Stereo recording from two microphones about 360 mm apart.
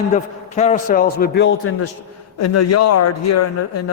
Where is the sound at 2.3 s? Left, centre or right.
Left.